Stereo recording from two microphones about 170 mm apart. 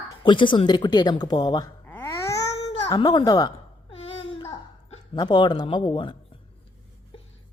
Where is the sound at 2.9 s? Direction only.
25° left (ahead or behind).